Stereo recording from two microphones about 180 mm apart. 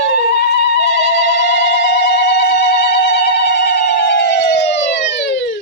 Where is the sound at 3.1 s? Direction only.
70° left (ahead or behind).